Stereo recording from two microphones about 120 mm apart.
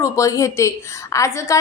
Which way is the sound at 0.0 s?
25° left (ahead or behind).